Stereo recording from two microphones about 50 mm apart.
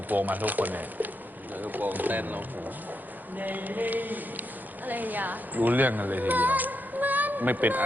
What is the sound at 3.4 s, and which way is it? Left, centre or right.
A woman's voice, right.